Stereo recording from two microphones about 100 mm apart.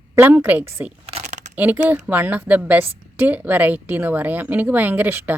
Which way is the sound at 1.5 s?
15° right (ahead or behind).